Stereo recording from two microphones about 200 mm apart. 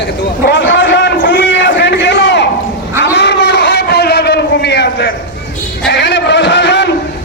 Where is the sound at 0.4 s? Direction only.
65° left (ahead or behind).